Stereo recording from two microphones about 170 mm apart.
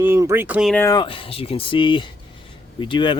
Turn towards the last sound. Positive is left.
turn(degrees=30)  # may be behind; listen again after turning